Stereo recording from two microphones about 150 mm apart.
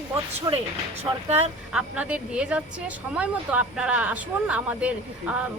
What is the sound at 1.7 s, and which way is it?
Speech, 10° right (ahead or behind).